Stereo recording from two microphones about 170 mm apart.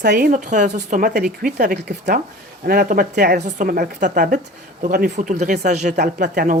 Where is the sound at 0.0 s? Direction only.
60° right (ahead or behind).